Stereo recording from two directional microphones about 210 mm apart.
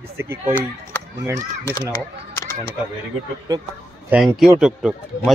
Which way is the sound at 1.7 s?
20° left (ahead or behind).